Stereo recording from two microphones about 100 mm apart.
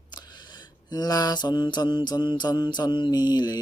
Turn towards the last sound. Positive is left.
turn(degrees=45)  # may be behind; listen again after turning